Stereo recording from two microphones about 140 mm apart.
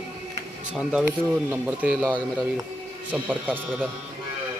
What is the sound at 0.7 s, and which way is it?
Speech, 10° right (ahead or behind).